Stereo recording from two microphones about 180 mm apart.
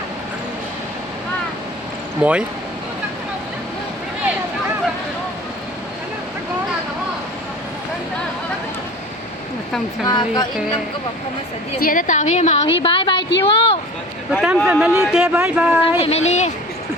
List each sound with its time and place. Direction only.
2.2 s speech: 5° right (ahead or behind)
10.1 s speech: 25° left (ahead or behind)
11.8 s a woman's voice: 50° left (ahead or behind); by 13.7 s 30° left (ahead or behind)
14.4 s speech: 5° right (ahead or behind)
16.0 s a woman's voice: 35° left (ahead or behind)